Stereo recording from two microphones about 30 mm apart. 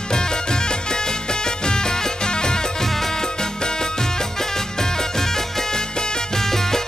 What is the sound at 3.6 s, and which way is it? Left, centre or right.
Music, left.